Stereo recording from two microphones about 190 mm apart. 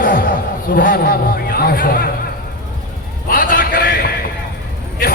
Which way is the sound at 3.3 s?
50° left (ahead or behind).